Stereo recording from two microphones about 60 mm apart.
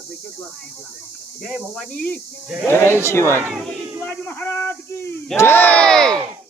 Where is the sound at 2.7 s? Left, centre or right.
Left.